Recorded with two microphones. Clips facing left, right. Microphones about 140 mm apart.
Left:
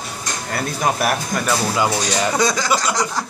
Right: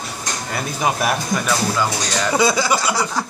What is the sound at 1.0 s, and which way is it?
Speech, 10° left (ahead or behind).